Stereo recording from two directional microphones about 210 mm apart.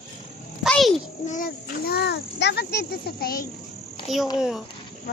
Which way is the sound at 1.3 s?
45° left (ahead or behind).